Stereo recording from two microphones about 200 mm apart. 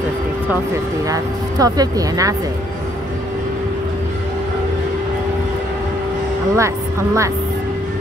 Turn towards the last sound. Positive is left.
turn(degrees=-15)  # may be behind; listen again after turning